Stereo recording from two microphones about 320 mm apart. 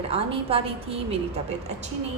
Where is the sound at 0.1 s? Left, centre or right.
Centre.